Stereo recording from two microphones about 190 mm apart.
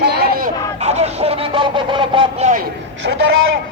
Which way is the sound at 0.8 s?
35° right (ahead or behind).